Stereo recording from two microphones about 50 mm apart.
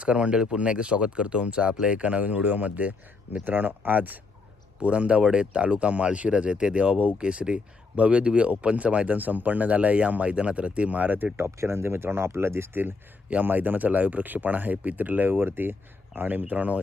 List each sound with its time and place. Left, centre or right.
0.0 s speech: right
11.3 s speech: right
13.3 s speech: right